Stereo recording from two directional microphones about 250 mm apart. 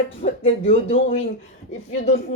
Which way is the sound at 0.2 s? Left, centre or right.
Left.